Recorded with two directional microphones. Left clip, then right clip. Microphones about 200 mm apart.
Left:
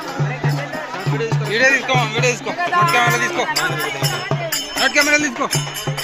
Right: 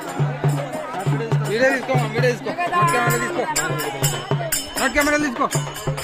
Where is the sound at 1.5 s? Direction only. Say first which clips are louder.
Left 4 dB; 20° right (ahead or behind).